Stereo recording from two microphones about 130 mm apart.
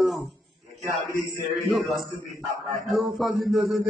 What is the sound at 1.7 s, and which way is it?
Speech, centre (ahead or behind).